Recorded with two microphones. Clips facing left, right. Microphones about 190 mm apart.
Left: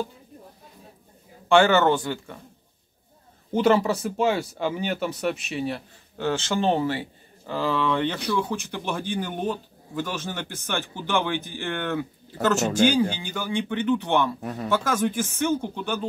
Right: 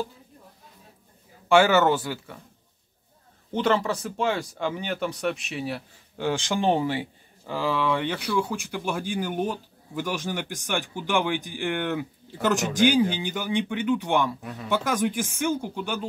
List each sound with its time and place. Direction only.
1.5 s speech: 5° right (ahead or behind)
3.5 s speech: 10° left (ahead or behind); by 14.3 s 10° right (ahead or behind)
14.4 s speech: 45° left (ahead or behind)
14.7 s speech: 15° right (ahead or behind)